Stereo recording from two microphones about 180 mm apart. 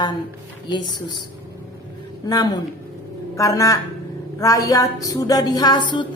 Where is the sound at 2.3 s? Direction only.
20° left (ahead or behind).